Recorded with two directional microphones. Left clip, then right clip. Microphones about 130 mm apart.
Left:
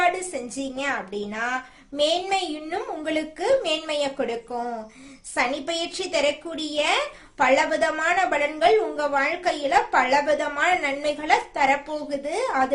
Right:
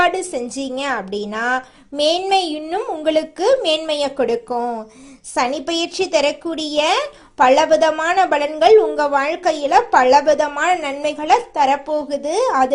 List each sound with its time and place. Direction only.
0.0 s a child's voice: 55° right (ahead or behind)